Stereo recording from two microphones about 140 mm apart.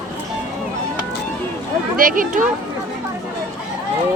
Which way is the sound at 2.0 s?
75° right (ahead or behind).